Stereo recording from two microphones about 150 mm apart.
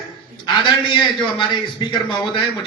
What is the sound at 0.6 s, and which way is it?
A man's voice, 30° left (ahead or behind).